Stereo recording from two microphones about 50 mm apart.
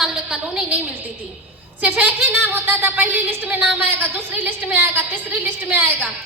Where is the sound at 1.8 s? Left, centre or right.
Right.